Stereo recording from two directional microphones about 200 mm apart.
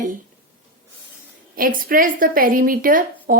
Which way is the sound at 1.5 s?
45° right (ahead or behind).